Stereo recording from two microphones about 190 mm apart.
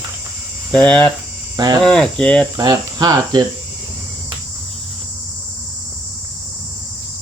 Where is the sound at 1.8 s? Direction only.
5° left (ahead or behind).